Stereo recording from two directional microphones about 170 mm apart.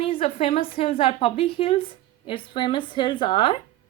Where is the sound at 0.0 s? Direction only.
35° left (ahead or behind).